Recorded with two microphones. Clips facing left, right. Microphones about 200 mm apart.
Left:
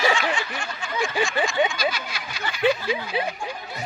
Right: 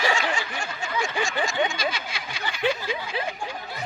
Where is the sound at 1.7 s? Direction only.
25° right (ahead or behind).